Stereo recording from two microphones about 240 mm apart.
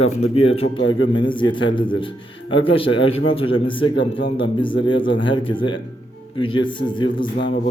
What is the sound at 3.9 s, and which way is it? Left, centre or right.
Speech, left.